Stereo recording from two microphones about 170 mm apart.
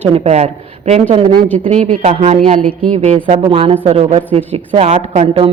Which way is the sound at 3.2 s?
30° right (ahead or behind).